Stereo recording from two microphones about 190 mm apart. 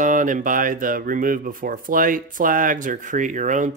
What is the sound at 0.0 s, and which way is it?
Speech, 45° right (ahead or behind).